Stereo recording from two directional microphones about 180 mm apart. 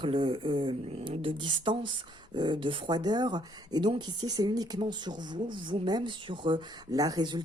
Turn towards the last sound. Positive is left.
turn(degrees=-25)  # may be behind; listen again after turning